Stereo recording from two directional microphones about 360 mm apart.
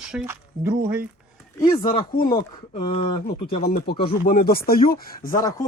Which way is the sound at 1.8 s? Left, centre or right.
Left.